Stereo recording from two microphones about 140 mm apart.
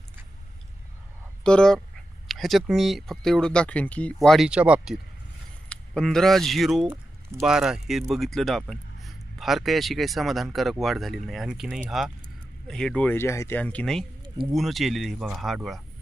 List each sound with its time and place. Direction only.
1.5 s speech: 5° left (ahead or behind)
5.6 s speech: 5° left (ahead or behind)
6.8 s a sound: 15° right (ahead or behind)
7.4 s speech: 5° right (ahead or behind); by 13.6 s 20° left (ahead or behind)
13.6 s speech: 10° left (ahead or behind)